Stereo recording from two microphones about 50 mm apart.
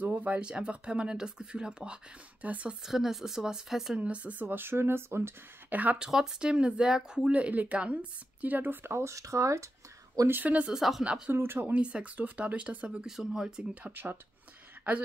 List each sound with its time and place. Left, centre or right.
0.0 s a sound: right
0.5 s speech: right
2.4 s speech: right
2.8 s speech: centre
3.9 s speech: right
5.7 s speech: right
5.9 s speech: centre
7.2 s speech: right
9.0 s speech: right
10.7 s speech: centre
11.3 s speech: right
11.7 s speech: right
13.1 s speech: centre